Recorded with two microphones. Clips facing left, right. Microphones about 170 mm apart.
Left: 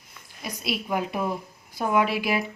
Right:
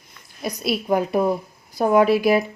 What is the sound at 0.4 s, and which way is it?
Speech, 40° right (ahead or behind).